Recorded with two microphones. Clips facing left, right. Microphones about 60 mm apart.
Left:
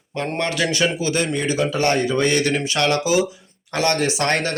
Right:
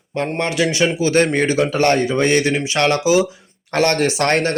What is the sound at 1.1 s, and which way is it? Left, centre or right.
A man's voice, right.